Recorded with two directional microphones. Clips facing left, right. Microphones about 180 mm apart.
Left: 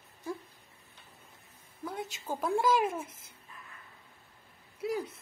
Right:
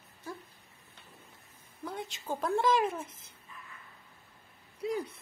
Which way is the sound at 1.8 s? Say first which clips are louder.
Left 1 dB; 5° left (ahead or behind).